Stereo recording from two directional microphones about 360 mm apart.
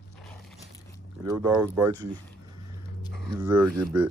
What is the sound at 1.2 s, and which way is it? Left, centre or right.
Speech, centre.